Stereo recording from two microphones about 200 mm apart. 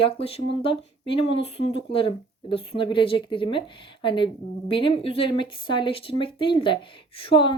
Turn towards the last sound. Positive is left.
turn(degrees=25)  # may be behind; listen again after turning